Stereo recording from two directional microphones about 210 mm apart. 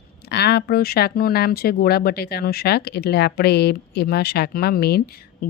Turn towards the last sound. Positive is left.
turn(degrees=50)  # may be behind; listen again after turning